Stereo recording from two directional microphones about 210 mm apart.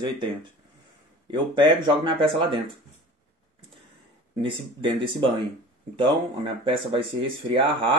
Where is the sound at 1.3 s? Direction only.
25° right (ahead or behind).